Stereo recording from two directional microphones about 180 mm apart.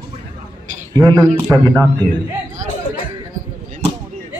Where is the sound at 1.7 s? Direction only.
5° left (ahead or behind).